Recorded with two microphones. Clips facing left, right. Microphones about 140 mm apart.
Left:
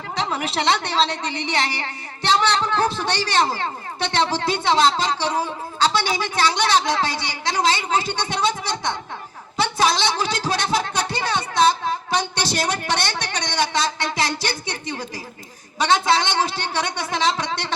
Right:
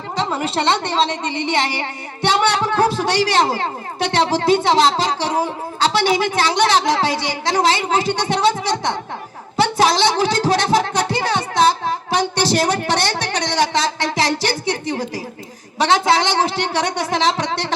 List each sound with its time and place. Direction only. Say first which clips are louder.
1.0 s a woman's voice: right 4 dB; centre (ahead or behind)
2.2 s speech: right 3 dB; 65° right (ahead or behind)
9.6 s music: right 5 dB; 55° right (ahead or behind)
12.1 s a sound: right 8 dB; 55° right (ahead or behind)
15.8 s speech: right 3 dB; 50° right (ahead or behind)